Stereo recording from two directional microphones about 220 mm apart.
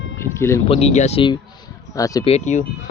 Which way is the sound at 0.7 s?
30° left (ahead or behind).